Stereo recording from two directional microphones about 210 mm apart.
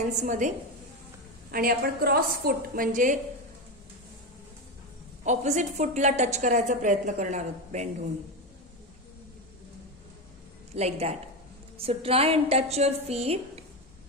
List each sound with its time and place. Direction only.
0.2 s a woman's voice: 35° right (ahead or behind)
1.5 s a woman's voice: 45° right (ahead or behind)
5.2 s a woman's voice: 35° right (ahead or behind)
10.8 s a woman's voice: 30° right (ahead or behind)